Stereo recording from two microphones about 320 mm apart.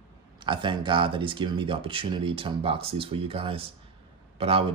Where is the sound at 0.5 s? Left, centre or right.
Centre.